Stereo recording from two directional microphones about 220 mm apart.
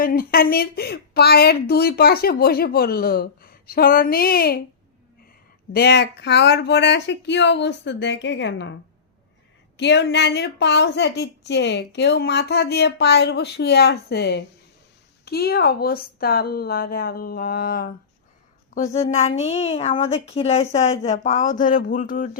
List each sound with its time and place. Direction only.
0.0 s a woman's voice: 40° left (ahead or behind)
5.7 s a woman's voice: 50° left (ahead or behind)
9.7 s a woman's voice: 55° left (ahead or behind); by 18.9 s 35° left (ahead or behind)
19.5 s a woman's voice: 25° left (ahead or behind)